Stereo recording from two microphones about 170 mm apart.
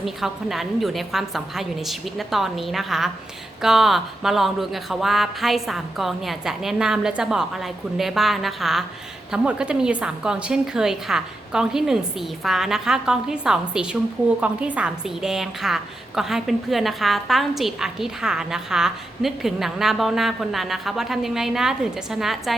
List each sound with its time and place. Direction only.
0.0 s a woman's voice: centre (ahead or behind)